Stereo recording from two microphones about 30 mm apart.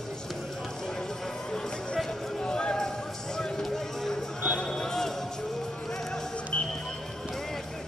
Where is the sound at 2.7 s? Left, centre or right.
Centre.